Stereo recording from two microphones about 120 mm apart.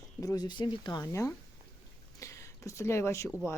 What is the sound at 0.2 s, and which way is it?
Speech, 30° left (ahead or behind).